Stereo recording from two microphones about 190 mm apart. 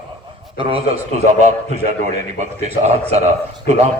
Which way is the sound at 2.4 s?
35° right (ahead or behind).